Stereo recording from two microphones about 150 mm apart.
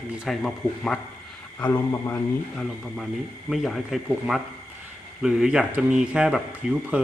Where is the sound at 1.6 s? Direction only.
15° left (ahead or behind).